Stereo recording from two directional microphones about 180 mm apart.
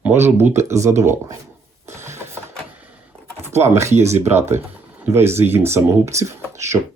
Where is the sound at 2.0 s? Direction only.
15° right (ahead or behind).